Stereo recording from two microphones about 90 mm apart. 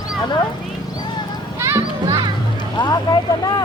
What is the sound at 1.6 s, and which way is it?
Children playing, 35° right (ahead or behind).